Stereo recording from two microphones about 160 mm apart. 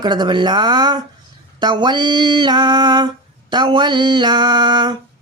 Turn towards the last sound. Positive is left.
turn(degrees=-25)  # may be behind; listen again after turning